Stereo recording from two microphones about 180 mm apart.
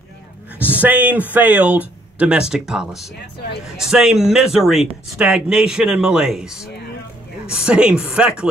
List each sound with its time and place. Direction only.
0.6 s speech: 10° right (ahead or behind)